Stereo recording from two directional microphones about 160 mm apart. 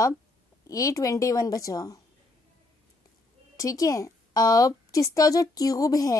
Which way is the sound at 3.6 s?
20° left (ahead or behind).